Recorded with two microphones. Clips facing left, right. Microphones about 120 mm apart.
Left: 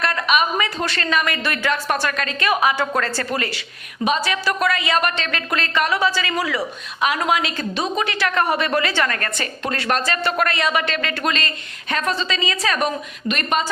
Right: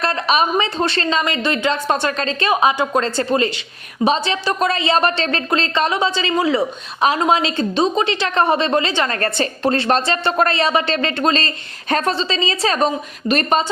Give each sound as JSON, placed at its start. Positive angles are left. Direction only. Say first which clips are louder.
{"t": 0.0, "sound": "a woman's voice", "louder": "right 2 dB", "side_deg": -30}